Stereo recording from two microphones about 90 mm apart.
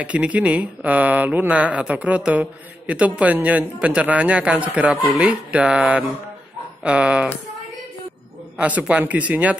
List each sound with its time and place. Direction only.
0.0 s speech: 15° right (ahead or behind)
8.5 s speech: 15° right (ahead or behind)